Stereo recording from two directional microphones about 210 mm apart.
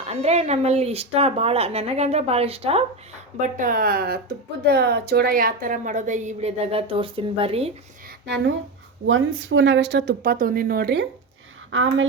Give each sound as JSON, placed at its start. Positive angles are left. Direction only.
{"t": 0.1, "sound": "speech", "side_deg": -30}
{"t": 3.4, "sound": "a woman's voice", "side_deg": -40}
{"t": 9.0, "sound": "a woman's voice", "side_deg": -65}
{"t": 11.7, "sound": "a woman's voice", "side_deg": -65}